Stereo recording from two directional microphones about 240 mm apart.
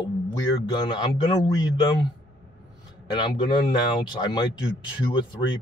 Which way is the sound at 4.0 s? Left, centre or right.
Centre.